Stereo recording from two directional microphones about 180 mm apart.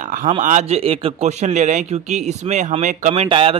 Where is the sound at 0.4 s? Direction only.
45° right (ahead or behind).